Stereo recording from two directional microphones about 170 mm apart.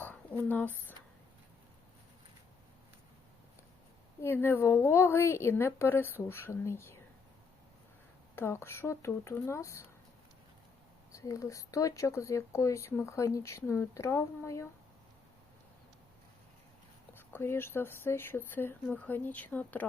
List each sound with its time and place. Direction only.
0.0 s a sound: 10° left (ahead or behind)
4.2 s speech: 15° left (ahead or behind)
8.4 s speech: 15° left (ahead or behind)
11.1 s speech: 20° left (ahead or behind)
17.2 s speech: 15° left (ahead or behind)